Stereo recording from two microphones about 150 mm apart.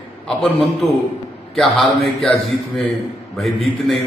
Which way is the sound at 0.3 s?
Centre (ahead or behind).